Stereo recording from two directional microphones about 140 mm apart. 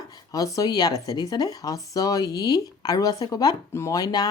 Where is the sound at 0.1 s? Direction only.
25° left (ahead or behind).